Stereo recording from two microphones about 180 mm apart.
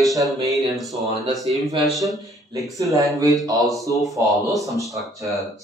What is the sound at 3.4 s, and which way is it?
Mantra, 20° right (ahead or behind).